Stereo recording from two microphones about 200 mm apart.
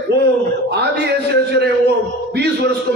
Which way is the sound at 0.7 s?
60° right (ahead or behind).